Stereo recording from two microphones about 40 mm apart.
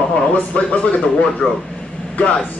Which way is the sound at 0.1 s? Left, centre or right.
Left.